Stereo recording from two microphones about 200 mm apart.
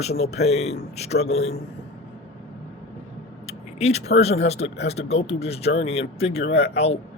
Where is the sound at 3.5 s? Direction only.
30° left (ahead or behind).